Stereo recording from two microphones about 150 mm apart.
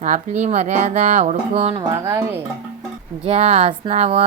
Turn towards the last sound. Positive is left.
turn(degrees=-45)  # may be behind; listen again after turning